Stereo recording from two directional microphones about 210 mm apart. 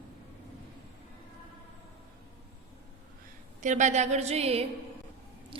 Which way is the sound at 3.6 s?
35° right (ahead or behind).